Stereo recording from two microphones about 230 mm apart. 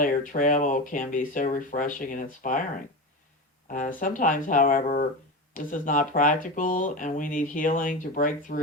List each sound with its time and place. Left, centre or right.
0.0 s speech: left
3.7 s speech: left